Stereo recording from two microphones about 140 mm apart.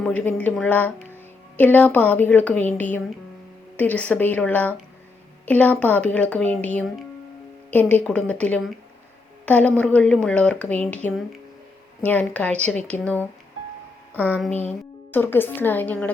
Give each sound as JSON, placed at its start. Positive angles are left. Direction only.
{"t": 0.0, "sound": "a woman's voice", "side_deg": 10}
{"t": 14.3, "sound": "speech", "side_deg": -10}
{"t": 15.1, "sound": "a woman's voice", "side_deg": 15}